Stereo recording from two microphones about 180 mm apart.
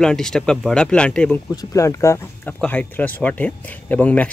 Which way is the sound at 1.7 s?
15° left (ahead or behind).